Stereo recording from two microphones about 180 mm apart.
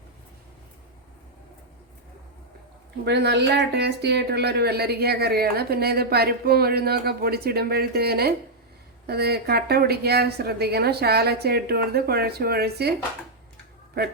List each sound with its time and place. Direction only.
3.0 s speech: 65° right (ahead or behind)